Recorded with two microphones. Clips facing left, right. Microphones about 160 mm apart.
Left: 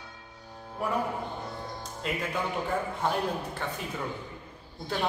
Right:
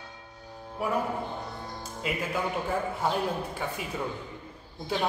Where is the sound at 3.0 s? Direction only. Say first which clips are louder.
Even; 5° right (ahead or behind).